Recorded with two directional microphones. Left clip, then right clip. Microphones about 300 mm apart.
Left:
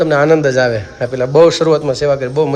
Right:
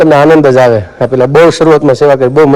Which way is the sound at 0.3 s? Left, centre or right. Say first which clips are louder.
Right 8 dB; right.